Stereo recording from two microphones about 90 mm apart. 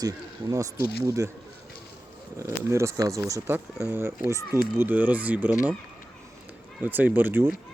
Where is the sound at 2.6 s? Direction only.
35° right (ahead or behind).